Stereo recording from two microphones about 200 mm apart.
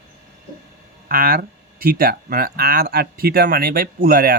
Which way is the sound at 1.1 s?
45° right (ahead or behind).